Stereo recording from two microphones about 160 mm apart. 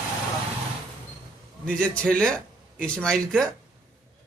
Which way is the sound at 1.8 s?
5° left (ahead or behind).